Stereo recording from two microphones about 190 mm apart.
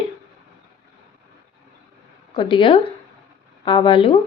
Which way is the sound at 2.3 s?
25° left (ahead or behind).